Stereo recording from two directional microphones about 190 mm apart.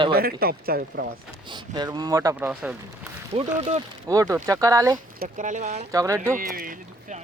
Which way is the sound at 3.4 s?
30° right (ahead or behind).